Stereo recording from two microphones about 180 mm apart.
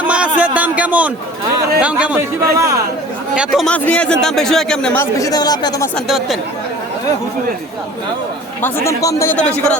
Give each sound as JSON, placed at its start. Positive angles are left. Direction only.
{"t": 0.1, "sound": "a sound", "side_deg": -5}
{"t": 1.8, "sound": "speech", "side_deg": -5}
{"t": 2.4, "sound": "speech", "side_deg": -15}
{"t": 3.3, "sound": "a man's voice", "side_deg": -5}
{"t": 5.2, "sound": "speech", "side_deg": 20}
{"t": 6.1, "sound": "a man's voice", "side_deg": 0}
{"t": 8.6, "sound": "a man's voice", "side_deg": 15}